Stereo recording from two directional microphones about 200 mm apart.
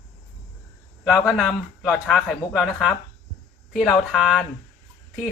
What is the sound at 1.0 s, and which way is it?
A man's voice, centre (ahead or behind).